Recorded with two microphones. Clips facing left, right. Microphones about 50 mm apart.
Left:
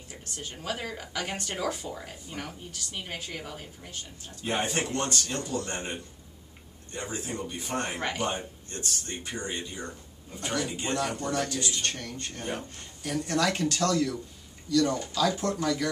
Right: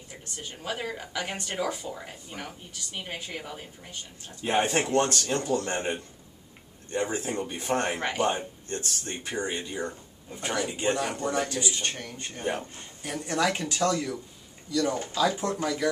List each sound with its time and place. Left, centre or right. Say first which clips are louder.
0.1 s speech: even; centre
4.7 s a man's voice: right 5 dB; right; by 15.9 s centre